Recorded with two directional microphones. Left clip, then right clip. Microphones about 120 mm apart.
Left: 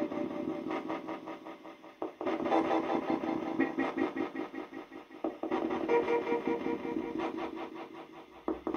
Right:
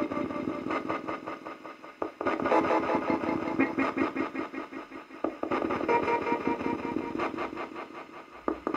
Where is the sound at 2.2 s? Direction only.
20° right (ahead or behind).